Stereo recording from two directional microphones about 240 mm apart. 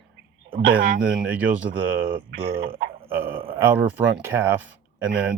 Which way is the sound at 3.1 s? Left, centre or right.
Centre.